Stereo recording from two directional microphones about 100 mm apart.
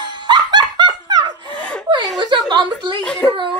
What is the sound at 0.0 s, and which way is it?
Snicker, 50° right (ahead or behind).